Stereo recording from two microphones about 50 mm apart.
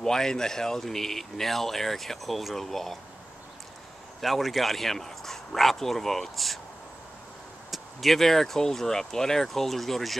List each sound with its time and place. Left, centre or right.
0.0 s speech: centre
4.2 s speech: centre
7.7 s speech: centre